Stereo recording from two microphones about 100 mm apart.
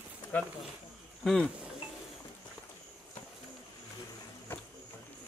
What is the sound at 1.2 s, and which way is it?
Speech, 5° left (ahead or behind).